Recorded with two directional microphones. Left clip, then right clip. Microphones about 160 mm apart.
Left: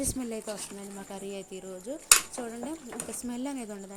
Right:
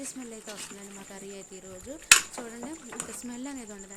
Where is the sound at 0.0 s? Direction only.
35° left (ahead or behind).